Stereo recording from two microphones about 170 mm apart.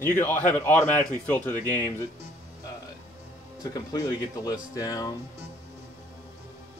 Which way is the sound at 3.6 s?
20° left (ahead or behind).